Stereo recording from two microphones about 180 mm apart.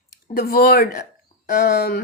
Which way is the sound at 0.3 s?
55° left (ahead or behind).